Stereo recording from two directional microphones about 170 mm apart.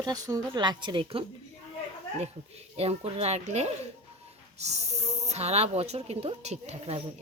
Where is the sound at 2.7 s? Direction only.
40° right (ahead or behind).